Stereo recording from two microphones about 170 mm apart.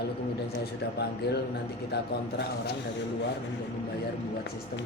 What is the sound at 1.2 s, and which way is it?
Speech, 70° left (ahead or behind).